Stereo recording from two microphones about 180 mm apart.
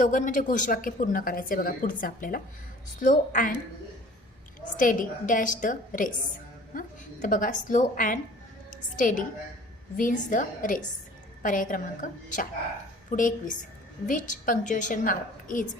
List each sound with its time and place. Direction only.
0.0 s a woman's voice: 45° left (ahead or behind)
4.8 s a woman's voice: 50° left (ahead or behind)